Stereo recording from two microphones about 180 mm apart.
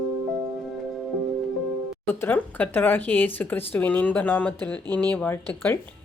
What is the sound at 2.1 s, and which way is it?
Speech, 10° left (ahead or behind).